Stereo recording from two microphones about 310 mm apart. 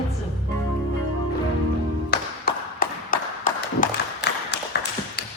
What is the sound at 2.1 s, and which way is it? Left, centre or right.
Clapping, left.